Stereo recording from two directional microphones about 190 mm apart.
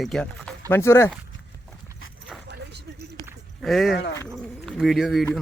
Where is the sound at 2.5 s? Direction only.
65° right (ahead or behind).